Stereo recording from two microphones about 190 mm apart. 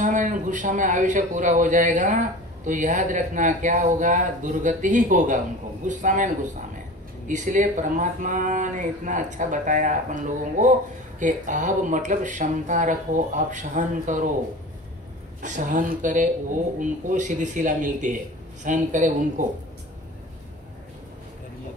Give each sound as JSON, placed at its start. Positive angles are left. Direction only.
{"t": 0.0, "sound": "a man's voice", "side_deg": -40}
{"t": 15.4, "sound": "a man's voice", "side_deg": -40}